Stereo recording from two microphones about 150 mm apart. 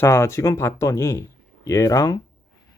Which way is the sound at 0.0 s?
20° left (ahead or behind).